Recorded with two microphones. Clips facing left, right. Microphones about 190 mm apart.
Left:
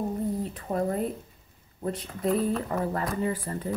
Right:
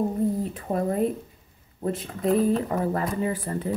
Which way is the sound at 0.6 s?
30° right (ahead or behind).